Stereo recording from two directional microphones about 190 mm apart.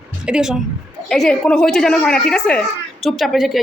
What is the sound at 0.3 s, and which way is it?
A woman's voice, 5° right (ahead or behind).